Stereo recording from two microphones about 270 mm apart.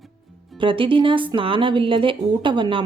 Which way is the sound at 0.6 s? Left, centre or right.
Centre.